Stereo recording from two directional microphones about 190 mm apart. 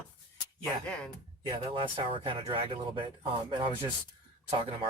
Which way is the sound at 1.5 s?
25° right (ahead or behind).